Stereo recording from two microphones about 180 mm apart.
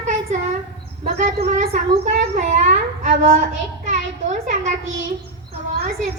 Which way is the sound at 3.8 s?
45° right (ahead or behind).